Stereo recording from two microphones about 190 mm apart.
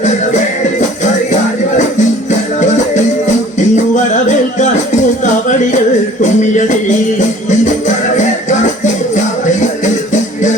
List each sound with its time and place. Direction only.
0.8 s music: 40° left (ahead or behind)
3.6 s music: 40° left (ahead or behind)
9.5 s music: 40° left (ahead or behind)